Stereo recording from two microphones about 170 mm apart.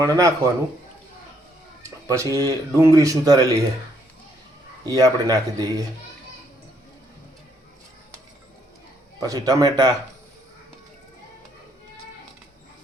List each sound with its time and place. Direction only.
0.0 s a man's voice: 20° right (ahead or behind)
1.8 s speech: 20° right (ahead or behind)
4.9 s speech: 20° right (ahead or behind)
9.2 s speech: 20° right (ahead or behind)